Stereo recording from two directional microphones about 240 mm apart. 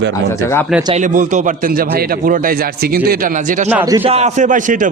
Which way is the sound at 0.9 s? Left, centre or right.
Right.